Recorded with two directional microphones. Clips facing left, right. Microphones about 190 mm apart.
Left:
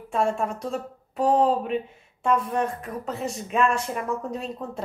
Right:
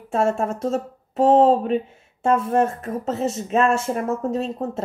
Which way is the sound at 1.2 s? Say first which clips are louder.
Right 6 dB; 25° right (ahead or behind).